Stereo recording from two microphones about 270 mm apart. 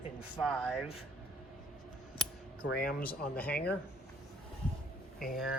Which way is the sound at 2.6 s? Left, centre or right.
Left.